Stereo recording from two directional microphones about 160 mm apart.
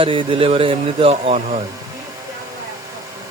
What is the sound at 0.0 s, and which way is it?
Speech, 30° right (ahead or behind).